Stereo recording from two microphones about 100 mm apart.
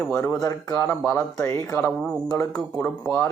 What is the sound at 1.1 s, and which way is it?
Speech, 25° left (ahead or behind).